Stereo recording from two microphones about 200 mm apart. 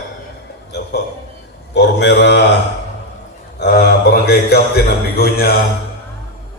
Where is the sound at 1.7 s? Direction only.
60° left (ahead or behind).